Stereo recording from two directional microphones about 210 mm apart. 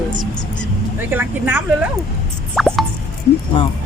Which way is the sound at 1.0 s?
10° right (ahead or behind).